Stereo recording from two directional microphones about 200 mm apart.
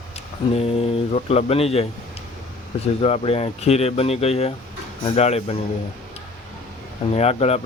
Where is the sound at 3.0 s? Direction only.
30° left (ahead or behind).